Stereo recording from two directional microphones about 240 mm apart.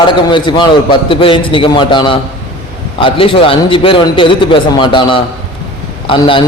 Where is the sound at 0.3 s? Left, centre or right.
Centre.